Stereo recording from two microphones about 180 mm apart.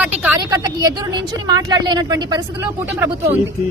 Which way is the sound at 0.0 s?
10° right (ahead or behind).